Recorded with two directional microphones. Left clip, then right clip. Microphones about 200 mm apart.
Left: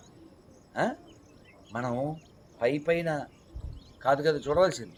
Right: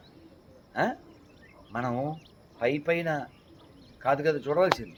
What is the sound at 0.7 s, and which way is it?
A man's voice, 5° left (ahead or behind).